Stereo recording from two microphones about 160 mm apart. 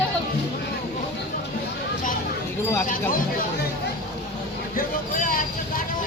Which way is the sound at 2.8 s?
60° left (ahead or behind).